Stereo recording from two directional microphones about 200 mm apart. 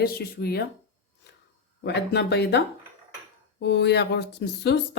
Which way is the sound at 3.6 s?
60° left (ahead or behind).